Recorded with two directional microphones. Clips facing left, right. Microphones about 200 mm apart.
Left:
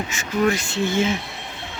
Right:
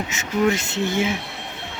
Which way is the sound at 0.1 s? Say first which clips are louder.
Even; 20° right (ahead or behind).